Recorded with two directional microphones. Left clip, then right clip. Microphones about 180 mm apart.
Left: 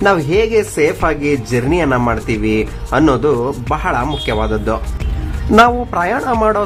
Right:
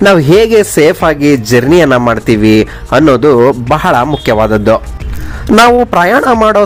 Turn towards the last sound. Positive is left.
turn(degrees=-35)  # may be behind; listen again after turning